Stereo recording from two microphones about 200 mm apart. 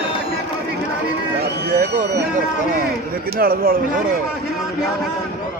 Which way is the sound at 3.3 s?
45° right (ahead or behind).